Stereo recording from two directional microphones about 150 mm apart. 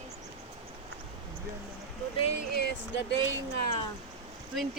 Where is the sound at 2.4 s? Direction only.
90° left.